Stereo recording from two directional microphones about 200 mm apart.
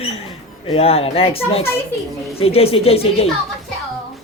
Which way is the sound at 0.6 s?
30° left (ahead or behind).